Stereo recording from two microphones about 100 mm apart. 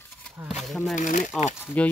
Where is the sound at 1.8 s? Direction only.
15° left (ahead or behind).